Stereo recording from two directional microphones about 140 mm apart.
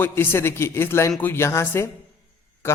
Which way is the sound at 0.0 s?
15° left (ahead or behind).